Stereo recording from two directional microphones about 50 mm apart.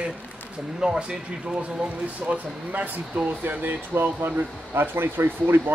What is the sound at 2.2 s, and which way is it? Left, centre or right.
Speech, right.